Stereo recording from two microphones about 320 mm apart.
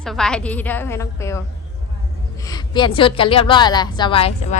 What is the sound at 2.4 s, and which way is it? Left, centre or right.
A woman's voice, centre.